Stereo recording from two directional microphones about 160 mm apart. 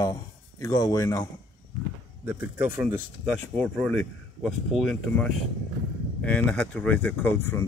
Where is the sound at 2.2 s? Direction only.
15° right (ahead or behind).